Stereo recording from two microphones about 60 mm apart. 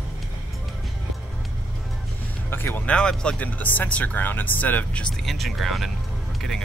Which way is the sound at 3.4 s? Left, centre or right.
Left.